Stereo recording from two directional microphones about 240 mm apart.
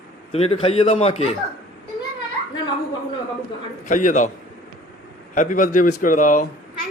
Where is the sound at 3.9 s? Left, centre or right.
Left.